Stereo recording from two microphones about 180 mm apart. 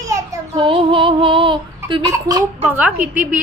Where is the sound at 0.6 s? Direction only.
30° right (ahead or behind).